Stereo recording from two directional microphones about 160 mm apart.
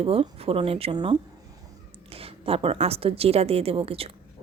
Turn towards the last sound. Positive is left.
turn(degrees=-35)  # may be behind; listen again after turning